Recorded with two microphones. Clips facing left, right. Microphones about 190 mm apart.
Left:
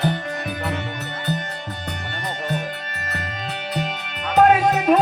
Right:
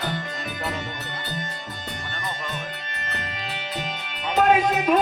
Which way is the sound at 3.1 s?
45° left (ahead or behind).